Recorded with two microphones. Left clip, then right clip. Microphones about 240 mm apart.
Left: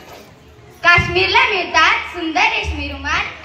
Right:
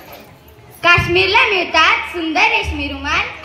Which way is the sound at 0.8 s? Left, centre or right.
Right.